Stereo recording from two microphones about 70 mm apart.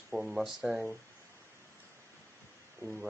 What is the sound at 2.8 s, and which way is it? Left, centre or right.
Speech, centre.